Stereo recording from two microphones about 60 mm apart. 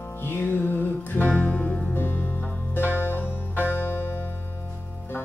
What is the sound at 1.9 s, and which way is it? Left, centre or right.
Music, left.